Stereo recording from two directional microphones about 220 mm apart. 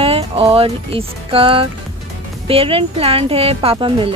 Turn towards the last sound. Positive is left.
turn(degrees=-25)  # may be behind; listen again after turning